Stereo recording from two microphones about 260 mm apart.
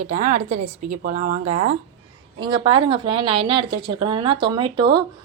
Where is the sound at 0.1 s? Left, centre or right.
Right.